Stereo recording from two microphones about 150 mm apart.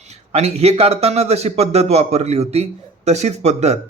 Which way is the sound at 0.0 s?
45° right (ahead or behind).